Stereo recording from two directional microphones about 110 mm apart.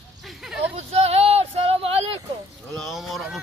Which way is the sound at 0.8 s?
70° right (ahead or behind).